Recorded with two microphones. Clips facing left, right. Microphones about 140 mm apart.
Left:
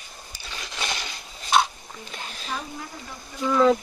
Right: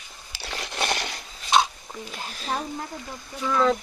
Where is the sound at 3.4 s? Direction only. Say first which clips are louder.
Left 3 dB; 10° left (ahead or behind).